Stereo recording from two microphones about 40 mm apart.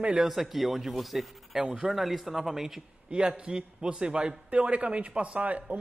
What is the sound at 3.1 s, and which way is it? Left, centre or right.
A man's voice, right.